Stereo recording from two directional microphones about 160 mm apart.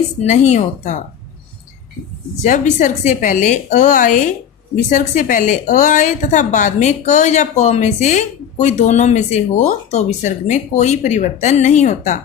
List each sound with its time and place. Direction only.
0.2 s a woman's voice: 45° left (ahead or behind)
2.4 s a woman's voice: 50° left (ahead or behind)